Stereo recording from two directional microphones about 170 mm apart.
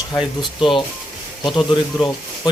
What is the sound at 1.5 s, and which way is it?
Speech, centre (ahead or behind).